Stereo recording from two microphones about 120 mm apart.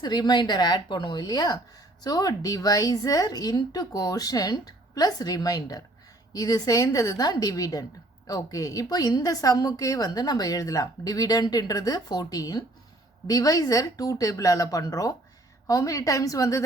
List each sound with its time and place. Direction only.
0.0 s a woman's voice: 35° left (ahead or behind)